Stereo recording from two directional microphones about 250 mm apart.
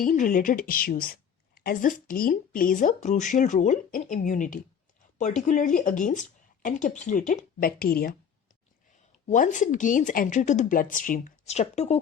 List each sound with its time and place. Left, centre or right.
0.0 s speech: left
9.2 s speech: left